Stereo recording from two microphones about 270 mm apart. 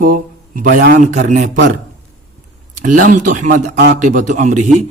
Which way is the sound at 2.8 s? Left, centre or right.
Right.